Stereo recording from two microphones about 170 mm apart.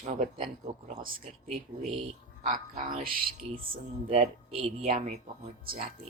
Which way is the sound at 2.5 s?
50° right (ahead or behind).